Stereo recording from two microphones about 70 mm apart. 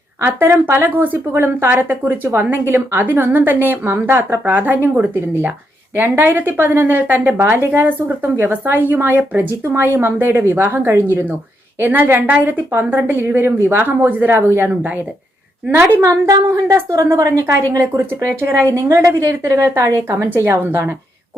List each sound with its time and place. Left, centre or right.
0.4 s a woman's voice: right
9.6 s a woman's voice: right
16.0 s a woman's voice: right